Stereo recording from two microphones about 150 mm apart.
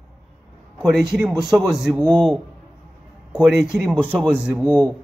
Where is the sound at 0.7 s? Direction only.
Centre (ahead or behind).